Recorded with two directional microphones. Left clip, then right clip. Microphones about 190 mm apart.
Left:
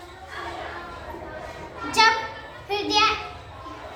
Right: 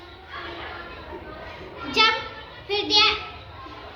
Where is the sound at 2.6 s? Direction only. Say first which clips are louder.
Right 2 dB; 25° left (ahead or behind).